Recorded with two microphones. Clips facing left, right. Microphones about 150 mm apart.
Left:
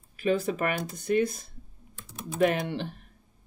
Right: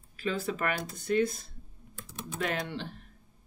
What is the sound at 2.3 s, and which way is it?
Speech, 15° left (ahead or behind).